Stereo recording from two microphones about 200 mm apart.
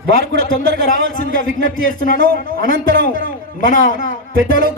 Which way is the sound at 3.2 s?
40° left (ahead or behind).